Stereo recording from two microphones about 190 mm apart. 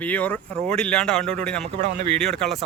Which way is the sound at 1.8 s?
35° right (ahead or behind).